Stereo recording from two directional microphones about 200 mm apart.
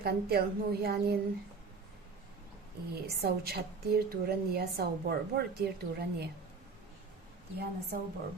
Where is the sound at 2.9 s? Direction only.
50° right (ahead or behind).